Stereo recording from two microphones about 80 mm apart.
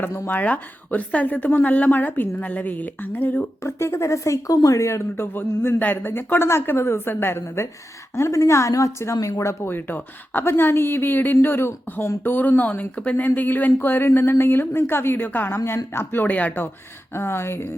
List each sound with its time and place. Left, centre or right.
0.0 s speech: left
3.6 s a woman's voice: left
17.2 s a woman's voice: left